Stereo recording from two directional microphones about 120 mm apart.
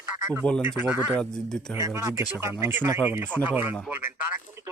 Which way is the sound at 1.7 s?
20° right (ahead or behind).